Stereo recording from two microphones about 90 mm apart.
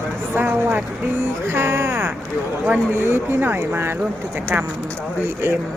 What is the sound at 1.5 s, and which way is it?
Music, 30° right (ahead or behind).